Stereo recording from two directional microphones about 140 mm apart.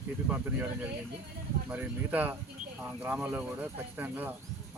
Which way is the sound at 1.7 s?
10° right (ahead or behind).